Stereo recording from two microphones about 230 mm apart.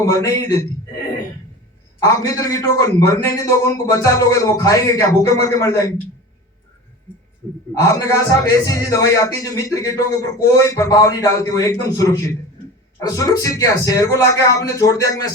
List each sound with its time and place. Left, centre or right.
0.0 s a man's voice: centre
2.0 s a man's voice: centre
7.8 s a man's voice: centre